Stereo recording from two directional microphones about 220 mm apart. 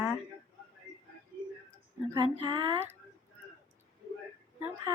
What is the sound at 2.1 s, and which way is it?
Speech, 20° right (ahead or behind).